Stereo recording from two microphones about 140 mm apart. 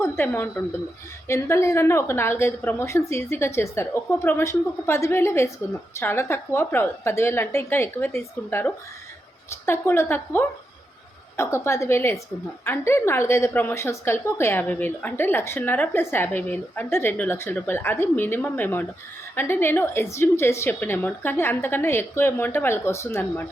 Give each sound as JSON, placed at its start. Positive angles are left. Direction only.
{"t": 0.0, "sound": "a woman's voice", "side_deg": 15}